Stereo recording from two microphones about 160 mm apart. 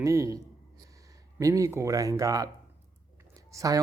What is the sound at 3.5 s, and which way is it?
Speech, 20° right (ahead or behind).